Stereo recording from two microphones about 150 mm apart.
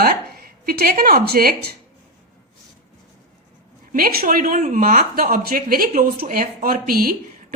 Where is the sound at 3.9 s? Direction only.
80° right.